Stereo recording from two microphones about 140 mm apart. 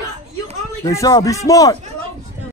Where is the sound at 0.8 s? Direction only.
25° left (ahead or behind).